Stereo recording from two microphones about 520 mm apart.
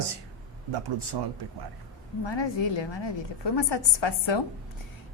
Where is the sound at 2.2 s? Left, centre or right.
Left.